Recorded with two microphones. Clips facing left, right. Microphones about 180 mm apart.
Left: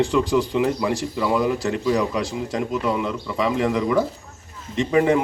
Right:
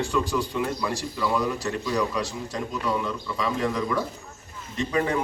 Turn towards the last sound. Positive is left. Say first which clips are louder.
# left 7 dB
turn(degrees=20)  # may be behind; listen again after turning